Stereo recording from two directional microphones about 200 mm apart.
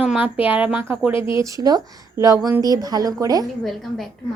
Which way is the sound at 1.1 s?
25° left (ahead or behind).